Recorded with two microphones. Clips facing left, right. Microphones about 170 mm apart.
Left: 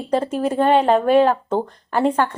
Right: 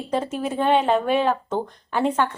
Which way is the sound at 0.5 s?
45° left (ahead or behind).